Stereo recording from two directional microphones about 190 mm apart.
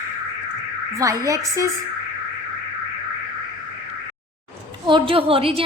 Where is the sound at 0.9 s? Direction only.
15° right (ahead or behind).